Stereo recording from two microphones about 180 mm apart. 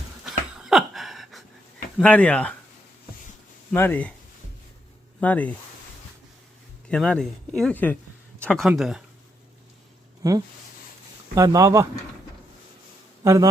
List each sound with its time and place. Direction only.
0.3 s a sound: centre (ahead or behind)
2.0 s speech: 10° left (ahead or behind)
3.7 s speech: 10° left (ahead or behind)
5.2 s speech: 10° left (ahead or behind)
6.8 s speech: 5° left (ahead or behind)
10.2 s speech: 20° right (ahead or behind)
13.2 s mantra: 15° right (ahead or behind)